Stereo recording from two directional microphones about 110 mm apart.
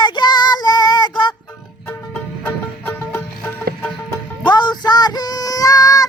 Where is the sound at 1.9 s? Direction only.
15° left (ahead or behind).